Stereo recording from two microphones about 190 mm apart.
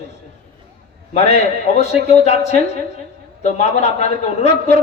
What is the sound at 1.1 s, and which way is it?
A man's voice, 35° left (ahead or behind).